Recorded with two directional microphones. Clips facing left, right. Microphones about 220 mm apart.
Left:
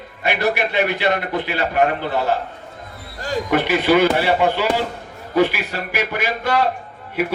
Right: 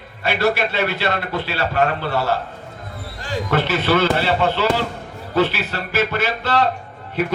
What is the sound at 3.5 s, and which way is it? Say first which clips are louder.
A man's voice: left 3 dB; 15° left (ahead or behind).